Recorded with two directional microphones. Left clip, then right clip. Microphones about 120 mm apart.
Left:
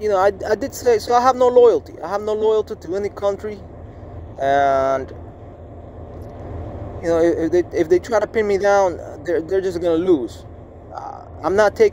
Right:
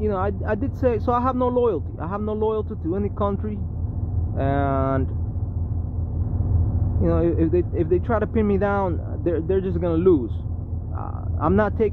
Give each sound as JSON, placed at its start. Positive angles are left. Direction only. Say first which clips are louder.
{"t": 0.0, "sound": "speech", "louder": "left 8 dB", "side_deg": 25}
{"t": 7.0, "sound": "speech", "louder": "left 5 dB", "side_deg": 15}
{"t": 11.4, "sound": "speech", "louder": "left 6 dB", "side_deg": 15}